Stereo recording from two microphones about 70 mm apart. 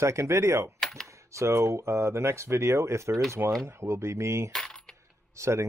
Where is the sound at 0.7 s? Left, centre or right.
Centre.